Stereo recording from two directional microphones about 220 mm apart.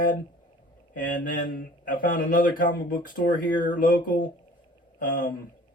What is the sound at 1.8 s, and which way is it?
Speech, 40° left (ahead or behind).